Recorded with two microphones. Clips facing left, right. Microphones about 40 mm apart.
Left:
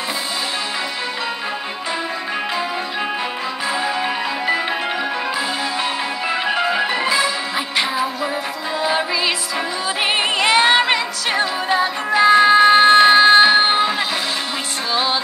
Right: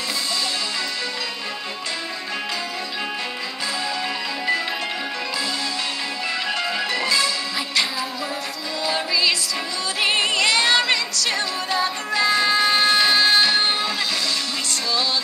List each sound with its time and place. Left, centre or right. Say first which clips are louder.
6.4 s music: left 7 dB; left
8.8 s music: left 2 dB; left